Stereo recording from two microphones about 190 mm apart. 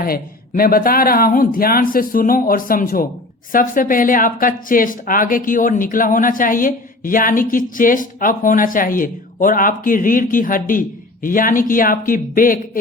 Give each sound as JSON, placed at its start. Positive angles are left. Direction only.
{"t": 0.0, "sound": "speech", "side_deg": 50}